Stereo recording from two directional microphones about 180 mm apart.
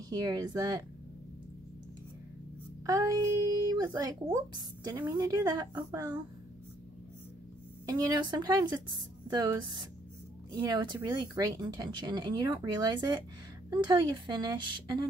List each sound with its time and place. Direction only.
0.1 s speech: 20° right (ahead or behind)
2.9 s speech: 20° right (ahead or behind)
7.8 s speech: 20° right (ahead or behind)